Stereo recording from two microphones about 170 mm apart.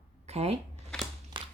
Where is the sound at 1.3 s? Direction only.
30° right (ahead or behind).